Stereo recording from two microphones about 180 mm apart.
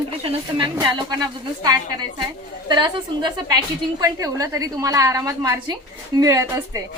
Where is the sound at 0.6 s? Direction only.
25° right (ahead or behind).